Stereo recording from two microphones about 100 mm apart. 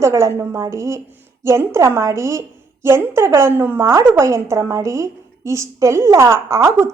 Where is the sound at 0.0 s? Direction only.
30° right (ahead or behind).